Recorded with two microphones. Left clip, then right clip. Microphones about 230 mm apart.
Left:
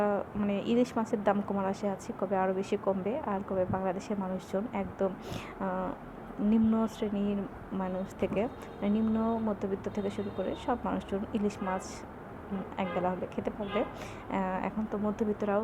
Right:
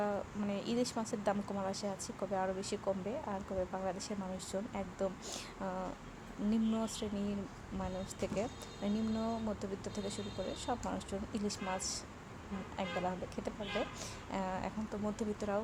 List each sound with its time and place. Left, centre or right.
0.0 s a sound: centre
0.7 s speech: centre
12.7 s speech: centre